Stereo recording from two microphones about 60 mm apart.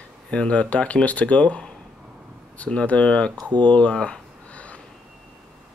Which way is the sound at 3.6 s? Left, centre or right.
Centre.